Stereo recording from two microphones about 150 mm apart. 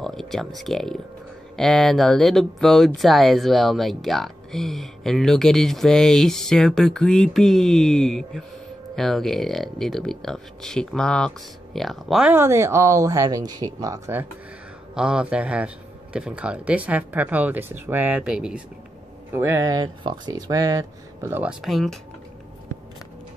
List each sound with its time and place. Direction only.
0.0 s speech: centre (ahead or behind)
12.3 s speech: 15° right (ahead or behind)
15.0 s a man's voice: 5° right (ahead or behind)
19.3 s speech: 20° right (ahead or behind); by 22.0 s centre (ahead or behind)